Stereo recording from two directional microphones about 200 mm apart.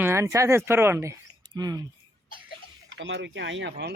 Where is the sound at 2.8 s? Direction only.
70° right (ahead or behind).